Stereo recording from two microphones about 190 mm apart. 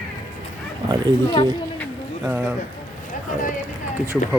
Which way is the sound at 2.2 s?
10° right (ahead or behind).